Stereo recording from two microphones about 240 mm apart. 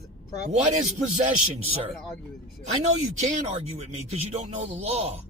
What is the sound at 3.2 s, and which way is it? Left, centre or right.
Speech, right.